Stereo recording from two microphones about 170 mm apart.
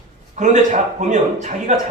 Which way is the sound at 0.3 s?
45° right (ahead or behind).